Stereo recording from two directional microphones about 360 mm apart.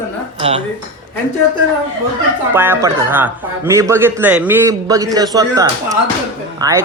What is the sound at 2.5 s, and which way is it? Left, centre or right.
A man's voice, centre.